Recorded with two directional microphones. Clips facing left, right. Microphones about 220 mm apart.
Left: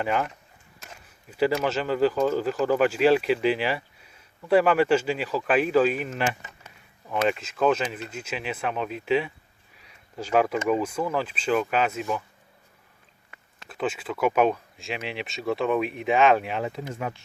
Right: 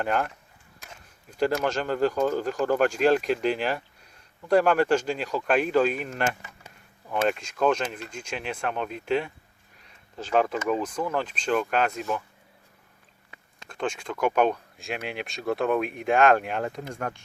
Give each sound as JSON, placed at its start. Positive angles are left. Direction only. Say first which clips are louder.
{"t": 0.0, "sound": "speech", "louder": "even", "side_deg": 0}
{"t": 9.7, "sound": "a sound", "louder": "left 2 dB", "side_deg": 10}
{"t": 10.7, "sound": "speech", "louder": "left 2 dB", "side_deg": 5}
{"t": 13.7, "sound": "speech", "louder": "left 2 dB", "side_deg": 5}